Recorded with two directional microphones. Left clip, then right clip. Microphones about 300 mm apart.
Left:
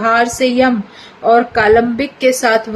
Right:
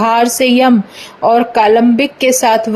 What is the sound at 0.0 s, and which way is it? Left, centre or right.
A woman's voice, centre.